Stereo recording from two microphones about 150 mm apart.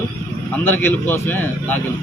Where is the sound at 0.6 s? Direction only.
15° left (ahead or behind).